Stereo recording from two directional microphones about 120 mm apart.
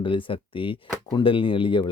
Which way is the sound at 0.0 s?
45° left (ahead or behind).